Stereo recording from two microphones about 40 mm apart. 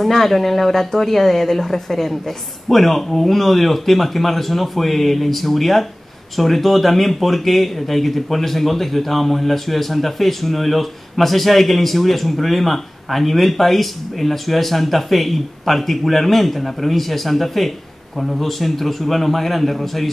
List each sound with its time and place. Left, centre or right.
0.0 s speech: centre